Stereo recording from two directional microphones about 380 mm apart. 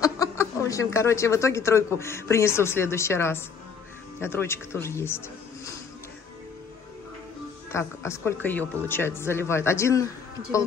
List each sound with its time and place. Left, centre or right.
0.0 s speech: centre
7.7 s speech: centre